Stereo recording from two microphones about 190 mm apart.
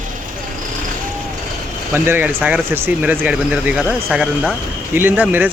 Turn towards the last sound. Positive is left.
turn(degrees=-10)  # may be behind; listen again after turning